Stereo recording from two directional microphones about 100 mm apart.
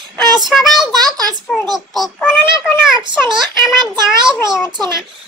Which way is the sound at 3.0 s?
50° right (ahead or behind).